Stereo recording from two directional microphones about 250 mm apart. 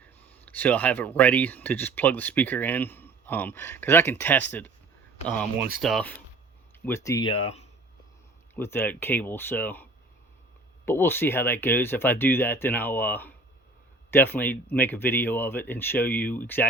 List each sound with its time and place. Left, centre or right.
0.0 s speech: centre; by 7.7 s left
8.5 s speech: centre
10.8 s speech: centre